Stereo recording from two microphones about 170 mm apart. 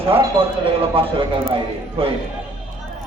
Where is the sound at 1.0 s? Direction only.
30° right (ahead or behind).